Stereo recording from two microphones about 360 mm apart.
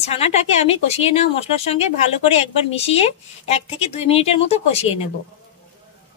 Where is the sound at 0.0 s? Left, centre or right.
Centre.